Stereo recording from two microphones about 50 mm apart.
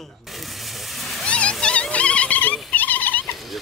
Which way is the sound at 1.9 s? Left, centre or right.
Left.